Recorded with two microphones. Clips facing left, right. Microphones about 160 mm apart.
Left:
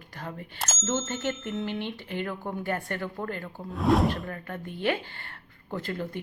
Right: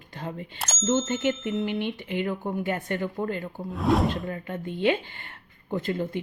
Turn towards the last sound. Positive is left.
turn(degrees=-20)  # may be behind; listen again after turning